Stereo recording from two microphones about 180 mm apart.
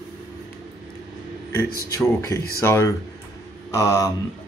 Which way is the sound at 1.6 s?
55° left (ahead or behind).